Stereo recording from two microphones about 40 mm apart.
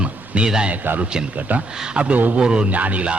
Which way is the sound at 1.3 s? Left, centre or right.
Right.